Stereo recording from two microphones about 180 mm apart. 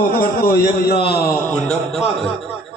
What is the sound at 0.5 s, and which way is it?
Speech, 55° left (ahead or behind).